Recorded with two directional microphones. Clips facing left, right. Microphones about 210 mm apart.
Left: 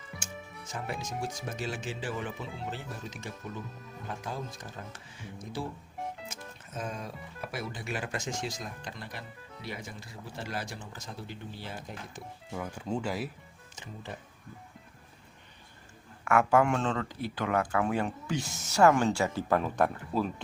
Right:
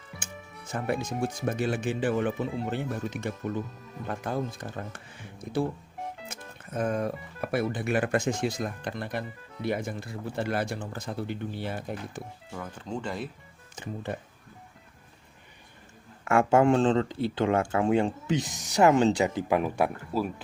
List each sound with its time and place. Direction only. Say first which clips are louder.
0.7 s speech: right 7 dB; 60° right (ahead or behind)
12.5 s speech: left 3 dB; 10° left (ahead or behind)
13.7 s speech: right 8 dB; 55° right (ahead or behind)
16.2 s speech: right 3 dB; 25° right (ahead or behind); by 20.3 s 10° right (ahead or behind)